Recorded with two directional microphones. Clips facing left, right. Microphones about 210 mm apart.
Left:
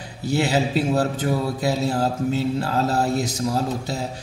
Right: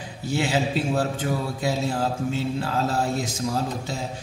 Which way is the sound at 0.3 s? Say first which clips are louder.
Left 3 dB; 40° left (ahead or behind).